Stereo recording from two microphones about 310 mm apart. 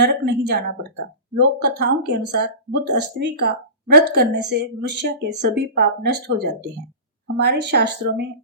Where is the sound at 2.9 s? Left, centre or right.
Right.